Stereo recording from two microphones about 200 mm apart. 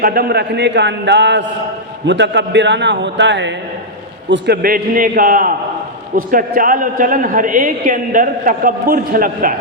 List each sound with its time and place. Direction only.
0.0 s a man's voice: 50° right (ahead or behind)